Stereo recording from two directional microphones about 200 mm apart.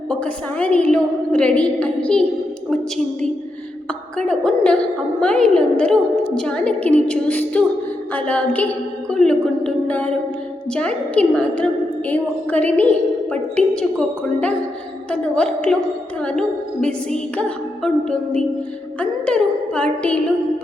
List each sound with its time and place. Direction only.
0.1 s a woman's voice: 5° left (ahead or behind)
15.1 s a woman's voice: 5° left (ahead or behind)